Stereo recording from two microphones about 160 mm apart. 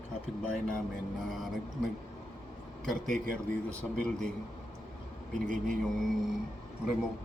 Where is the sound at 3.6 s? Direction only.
5° left (ahead or behind).